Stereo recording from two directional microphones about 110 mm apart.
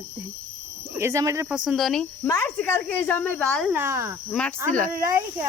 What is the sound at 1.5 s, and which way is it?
Speech, 10° right (ahead or behind).